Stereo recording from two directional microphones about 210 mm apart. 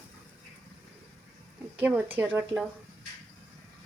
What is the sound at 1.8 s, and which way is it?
Speech, 10° right (ahead or behind).